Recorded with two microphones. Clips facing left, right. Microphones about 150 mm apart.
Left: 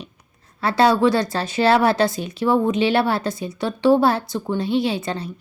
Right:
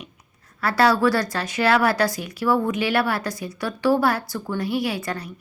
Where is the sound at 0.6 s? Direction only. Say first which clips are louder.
Left 2 dB; 25° left (ahead or behind).